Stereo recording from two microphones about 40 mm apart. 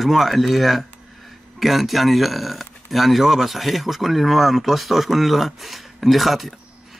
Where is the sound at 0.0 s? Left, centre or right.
Centre.